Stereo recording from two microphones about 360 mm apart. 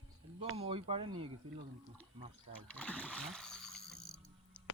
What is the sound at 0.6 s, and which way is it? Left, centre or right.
Speech, centre.